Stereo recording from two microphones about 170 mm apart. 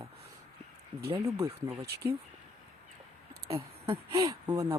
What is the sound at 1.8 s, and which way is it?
Speech, 70° right (ahead or behind).